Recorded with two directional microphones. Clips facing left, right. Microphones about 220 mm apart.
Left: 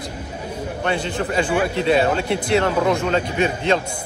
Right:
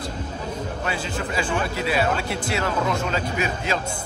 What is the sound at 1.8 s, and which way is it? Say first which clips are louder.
Speech: left 5 dB; 25° left (ahead or behind).